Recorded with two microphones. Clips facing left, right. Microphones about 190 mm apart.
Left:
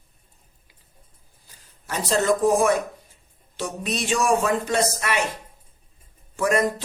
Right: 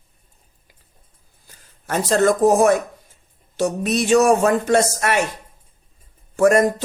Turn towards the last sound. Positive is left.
turn(degrees=-45)  # may be behind; listen again after turning